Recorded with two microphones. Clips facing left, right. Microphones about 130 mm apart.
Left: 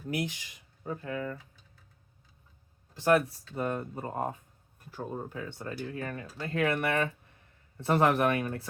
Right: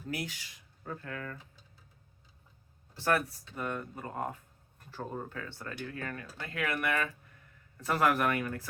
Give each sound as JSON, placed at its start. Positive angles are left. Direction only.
{"t": 0.1, "sound": "speech", "side_deg": 20}
{"t": 3.0, "sound": "speech", "side_deg": 20}
{"t": 3.5, "sound": "speech", "side_deg": 35}
{"t": 4.9, "sound": "speech", "side_deg": 10}